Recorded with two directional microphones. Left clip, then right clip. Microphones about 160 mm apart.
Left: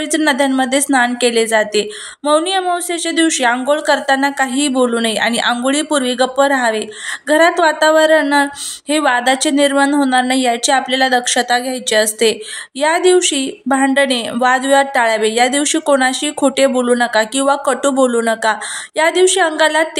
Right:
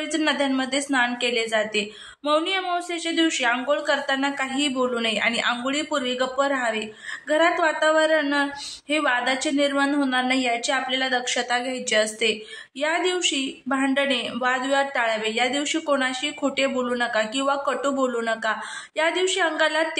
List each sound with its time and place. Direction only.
0.1 s a woman's voice: 40° left (ahead or behind)